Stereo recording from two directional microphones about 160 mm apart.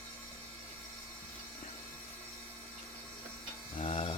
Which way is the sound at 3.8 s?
35° left (ahead or behind).